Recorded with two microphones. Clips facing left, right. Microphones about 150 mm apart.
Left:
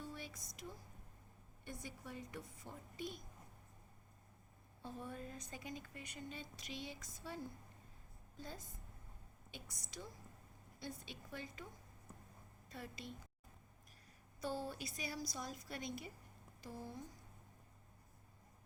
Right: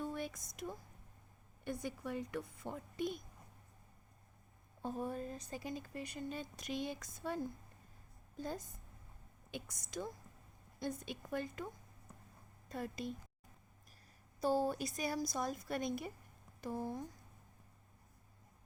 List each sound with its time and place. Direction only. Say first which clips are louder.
0.0 s a sound: right 9 dB; 55° right (ahead or behind)
0.5 s a woman's voice: right 7 dB; 55° right (ahead or behind)
1.6 s a woman's voice: right 9 dB; 65° right (ahead or behind)
4.8 s speech: right 8 dB; 45° right (ahead or behind)
6.2 s a woman's voice: right 7 dB; 45° right (ahead or behind)
10.8 s a woman's voice: right 8 dB; 50° right (ahead or behind)
14.4 s a woman's voice: right 9 dB; 40° right (ahead or behind)